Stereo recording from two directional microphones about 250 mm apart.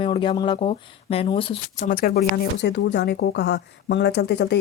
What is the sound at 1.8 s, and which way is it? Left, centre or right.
A woman's voice, left.